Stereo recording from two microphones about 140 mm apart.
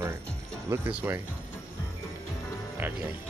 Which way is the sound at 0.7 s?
15° right (ahead or behind).